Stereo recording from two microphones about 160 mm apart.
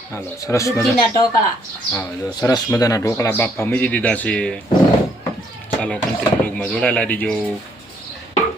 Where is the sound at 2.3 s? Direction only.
25° left (ahead or behind); by 4.6 s 5° left (ahead or behind).